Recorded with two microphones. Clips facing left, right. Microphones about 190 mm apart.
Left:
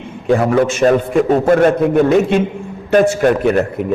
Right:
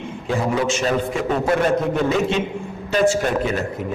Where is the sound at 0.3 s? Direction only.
55° left (ahead or behind).